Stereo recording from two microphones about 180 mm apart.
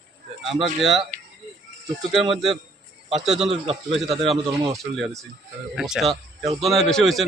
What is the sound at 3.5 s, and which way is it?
Speech, 35° right (ahead or behind).